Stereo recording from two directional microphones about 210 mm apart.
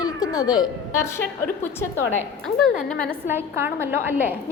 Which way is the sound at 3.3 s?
10° right (ahead or behind).